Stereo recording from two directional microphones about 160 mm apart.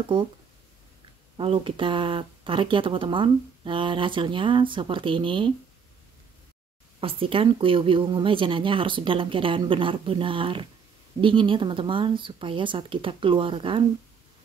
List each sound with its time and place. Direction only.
1.3 s speech: 35° right (ahead or behind)
7.0 s speech: 35° right (ahead or behind)